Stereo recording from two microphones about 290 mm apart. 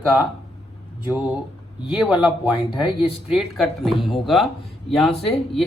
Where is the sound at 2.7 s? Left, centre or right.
Centre.